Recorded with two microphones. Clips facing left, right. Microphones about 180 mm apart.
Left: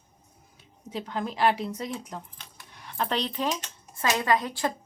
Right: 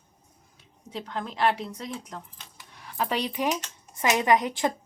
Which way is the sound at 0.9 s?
5° left (ahead or behind).